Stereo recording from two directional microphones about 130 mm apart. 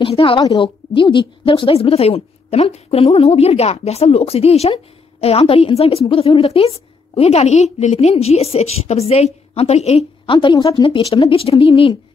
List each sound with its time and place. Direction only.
0.0 s a woman's voice: 45° left (ahead or behind)
10.3 s a woman's voice: 35° left (ahead or behind)